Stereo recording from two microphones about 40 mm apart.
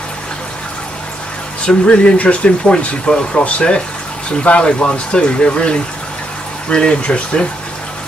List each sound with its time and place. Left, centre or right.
1.7 s speech: left